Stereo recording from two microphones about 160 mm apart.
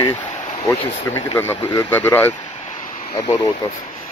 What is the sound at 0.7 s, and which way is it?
Speech, 15° left (ahead or behind).